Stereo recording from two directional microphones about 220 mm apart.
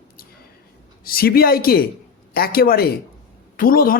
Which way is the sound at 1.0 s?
40° left (ahead or behind).